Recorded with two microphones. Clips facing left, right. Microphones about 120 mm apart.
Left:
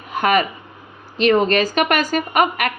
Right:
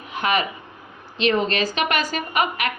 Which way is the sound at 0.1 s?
45° left (ahead or behind).